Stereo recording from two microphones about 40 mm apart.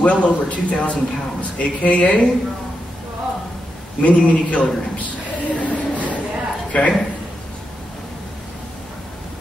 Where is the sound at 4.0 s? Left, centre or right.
Left.